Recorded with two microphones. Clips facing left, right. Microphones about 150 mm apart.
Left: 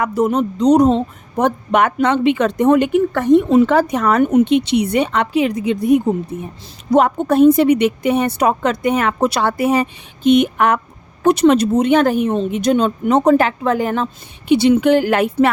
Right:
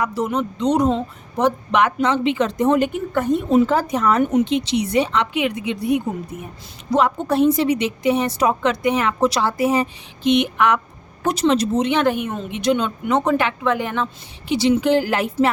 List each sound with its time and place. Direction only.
0.0 s speech: 50° left (ahead or behind)
1.4 s speech: 50° left (ahead or behind)
5.3 s speech: 40° left (ahead or behind)
6.3 s a woman's voice: 30° left (ahead or behind)
6.9 s a woman's voice: 50° left (ahead or behind)
10.2 s a woman's voice: 45° left (ahead or behind)
11.2 s a woman's voice: 60° left (ahead or behind); by 12.5 s 30° left (ahead or behind)
12.5 s speech: 45° left (ahead or behind)
14.4 s speech: 60° left (ahead or behind)